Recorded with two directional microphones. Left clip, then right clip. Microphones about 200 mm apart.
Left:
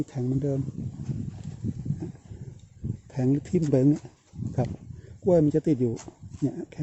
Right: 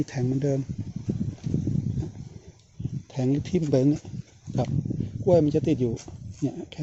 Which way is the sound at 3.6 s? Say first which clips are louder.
Right 1 dB; 20° left (ahead or behind).